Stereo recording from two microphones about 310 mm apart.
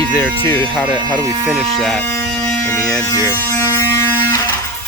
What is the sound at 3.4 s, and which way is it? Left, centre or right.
Music, centre.